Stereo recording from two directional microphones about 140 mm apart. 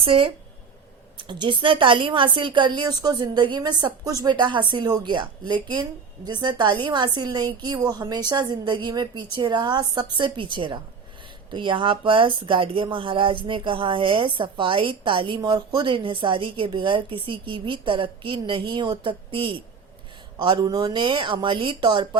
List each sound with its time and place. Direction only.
0.0 s speech: 40° right (ahead or behind)